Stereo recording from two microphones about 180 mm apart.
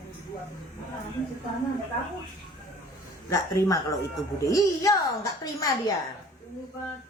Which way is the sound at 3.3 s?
20° left (ahead or behind).